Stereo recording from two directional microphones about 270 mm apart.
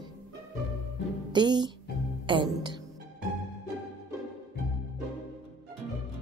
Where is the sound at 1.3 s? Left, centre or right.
Centre.